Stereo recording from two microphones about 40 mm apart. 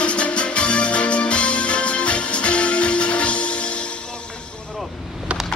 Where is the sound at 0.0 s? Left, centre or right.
Left.